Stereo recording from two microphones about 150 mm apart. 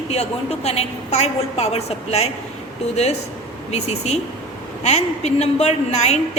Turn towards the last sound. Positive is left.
turn(degrees=50)  # may be behind; listen again after turning